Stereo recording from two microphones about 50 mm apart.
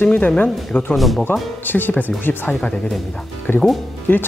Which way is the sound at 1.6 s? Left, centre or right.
Left.